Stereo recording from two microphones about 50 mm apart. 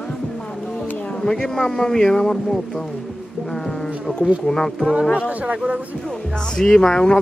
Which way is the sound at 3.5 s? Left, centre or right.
Centre.